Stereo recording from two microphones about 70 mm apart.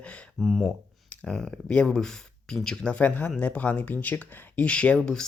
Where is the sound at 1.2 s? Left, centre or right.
Centre.